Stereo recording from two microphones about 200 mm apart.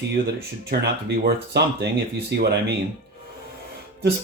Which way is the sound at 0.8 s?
55° right (ahead or behind).